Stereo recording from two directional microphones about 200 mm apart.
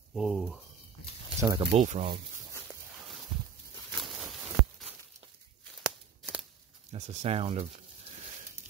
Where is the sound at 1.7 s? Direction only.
35° right (ahead or behind).